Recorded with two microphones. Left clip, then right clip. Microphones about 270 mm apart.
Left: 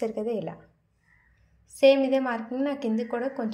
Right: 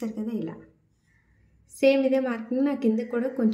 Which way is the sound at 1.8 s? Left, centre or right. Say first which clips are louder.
Left 1 dB; centre.